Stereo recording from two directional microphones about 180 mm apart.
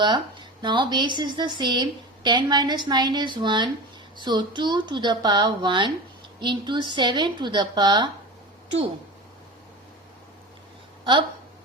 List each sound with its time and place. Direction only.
0.0 s a woman's voice: 25° right (ahead or behind)
11.0 s speech: 25° right (ahead or behind)